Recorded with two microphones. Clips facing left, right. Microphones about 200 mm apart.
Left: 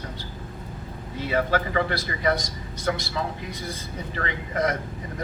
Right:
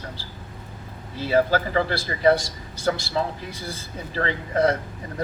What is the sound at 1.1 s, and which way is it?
A man's voice, 30° right (ahead or behind).